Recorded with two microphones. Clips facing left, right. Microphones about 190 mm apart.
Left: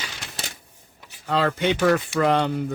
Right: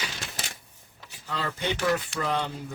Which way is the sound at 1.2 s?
70° left (ahead or behind).